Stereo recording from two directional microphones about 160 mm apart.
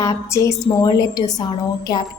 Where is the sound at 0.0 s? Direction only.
20° left (ahead or behind).